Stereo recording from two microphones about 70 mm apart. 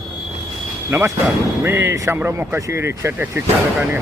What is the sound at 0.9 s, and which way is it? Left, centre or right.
Speech, right.